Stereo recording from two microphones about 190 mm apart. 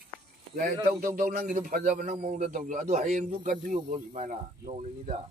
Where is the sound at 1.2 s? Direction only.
45° right (ahead or behind).